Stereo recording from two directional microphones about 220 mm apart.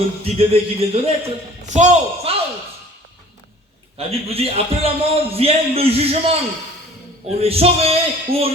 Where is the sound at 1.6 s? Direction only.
35° right (ahead or behind).